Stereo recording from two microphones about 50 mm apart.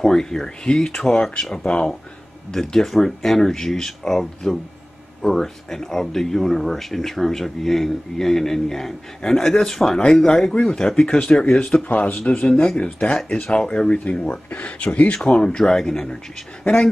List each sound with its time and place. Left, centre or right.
0.0 s speech: centre
14.2 s speech: left; by 16.1 s centre
16.6 s speech: left